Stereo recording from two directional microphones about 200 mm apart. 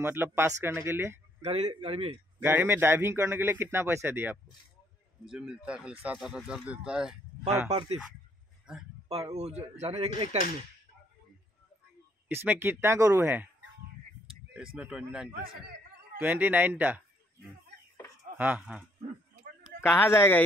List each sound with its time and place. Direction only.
0.0 s a man's voice: 10° right (ahead or behind)
1.4 s a man's voice: 30° right (ahead or behind)
2.4 s a man's voice: 10° right (ahead or behind)
9.3 s a man's voice: 30° right (ahead or behind)
12.3 s a man's voice: 10° right (ahead or behind)
14.8 s a man's voice: 5° right (ahead or behind)
20.0 s speech: 10° left (ahead or behind)